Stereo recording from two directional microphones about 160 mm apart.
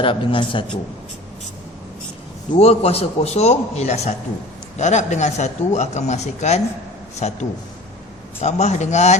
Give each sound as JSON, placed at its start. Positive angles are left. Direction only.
{"t": 0.0, "sound": "a man's voice", "side_deg": 35}
{"t": 2.5, "sound": "speech", "side_deg": 40}